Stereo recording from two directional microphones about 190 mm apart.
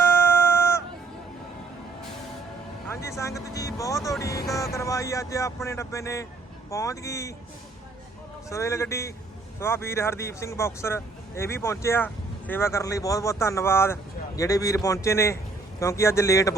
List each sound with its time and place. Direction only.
0.0 s a sound: 10° left (ahead or behind)
2.9 s speech: 15° left (ahead or behind)
8.4 s speech: 15° left (ahead or behind)